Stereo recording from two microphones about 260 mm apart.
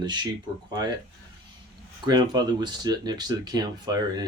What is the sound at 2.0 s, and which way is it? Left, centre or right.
Speech, centre.